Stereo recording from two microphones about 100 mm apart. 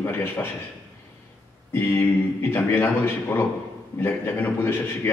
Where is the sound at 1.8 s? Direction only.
20° left (ahead or behind).